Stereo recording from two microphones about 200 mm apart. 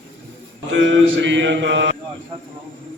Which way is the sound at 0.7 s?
65° right (ahead or behind).